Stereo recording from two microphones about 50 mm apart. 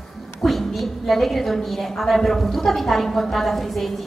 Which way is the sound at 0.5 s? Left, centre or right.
Centre.